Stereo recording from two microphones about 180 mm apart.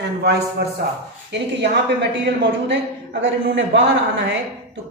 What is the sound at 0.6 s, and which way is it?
A woman's voice, 70° right (ahead or behind).